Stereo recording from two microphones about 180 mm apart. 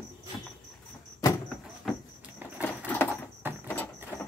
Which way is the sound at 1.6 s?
5° right (ahead or behind).